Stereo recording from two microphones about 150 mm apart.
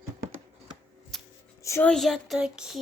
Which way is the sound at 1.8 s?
5° left (ahead or behind).